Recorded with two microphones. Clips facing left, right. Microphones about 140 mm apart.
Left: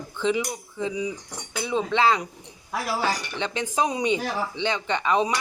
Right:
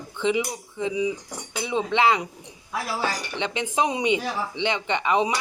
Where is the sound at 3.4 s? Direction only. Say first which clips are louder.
Right 3 dB; 25° right (ahead or behind).